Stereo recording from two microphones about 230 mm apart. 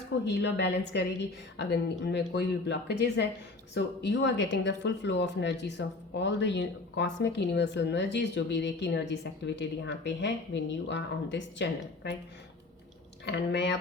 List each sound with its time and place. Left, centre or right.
0.3 s speech: left
13.2 s speech: left